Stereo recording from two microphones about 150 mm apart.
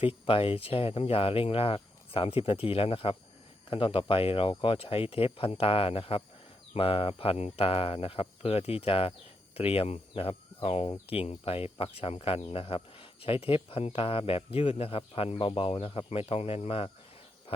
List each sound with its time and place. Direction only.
0.1 s speech: 35° left (ahead or behind)